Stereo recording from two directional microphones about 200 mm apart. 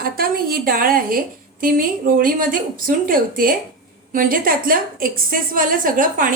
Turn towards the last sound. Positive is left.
turn(degrees=-40)  # may be behind; listen again after turning